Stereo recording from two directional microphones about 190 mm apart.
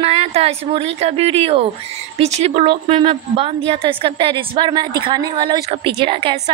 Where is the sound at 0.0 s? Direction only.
30° right (ahead or behind).